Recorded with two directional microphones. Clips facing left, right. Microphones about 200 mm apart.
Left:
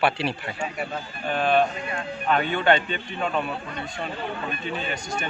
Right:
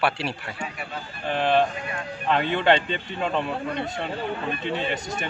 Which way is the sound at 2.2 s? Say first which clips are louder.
Right 1 dB; 25° right (ahead or behind).